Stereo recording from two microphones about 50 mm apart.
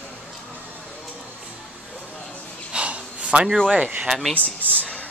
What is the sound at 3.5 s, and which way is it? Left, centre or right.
Speech, centre.